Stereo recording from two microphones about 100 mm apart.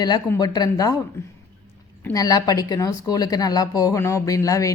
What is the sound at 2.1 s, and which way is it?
Speech, 40° left (ahead or behind).